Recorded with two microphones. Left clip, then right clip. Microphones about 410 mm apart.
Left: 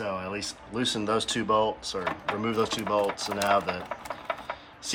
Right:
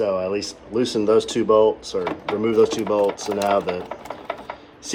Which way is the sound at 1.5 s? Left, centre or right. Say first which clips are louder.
Right 9 dB; left.